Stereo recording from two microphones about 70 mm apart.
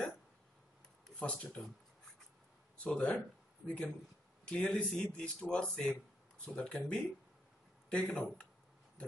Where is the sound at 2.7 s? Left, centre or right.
Centre.